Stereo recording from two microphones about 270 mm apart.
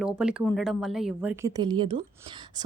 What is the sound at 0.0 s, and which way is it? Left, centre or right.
A woman's voice, centre.